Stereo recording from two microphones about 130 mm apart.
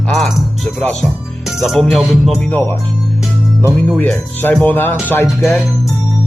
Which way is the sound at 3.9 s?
10° left (ahead or behind).